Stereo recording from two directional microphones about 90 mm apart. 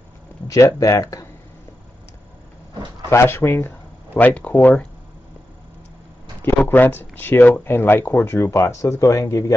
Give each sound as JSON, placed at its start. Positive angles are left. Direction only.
{"t": 0.5, "sound": "speech", "side_deg": 40}
{"t": 3.1, "sound": "speech", "side_deg": 30}
{"t": 6.4, "sound": "speech", "side_deg": 20}